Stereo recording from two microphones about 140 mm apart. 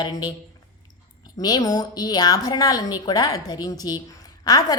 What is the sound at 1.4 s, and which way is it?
A woman's voice, 30° left (ahead or behind).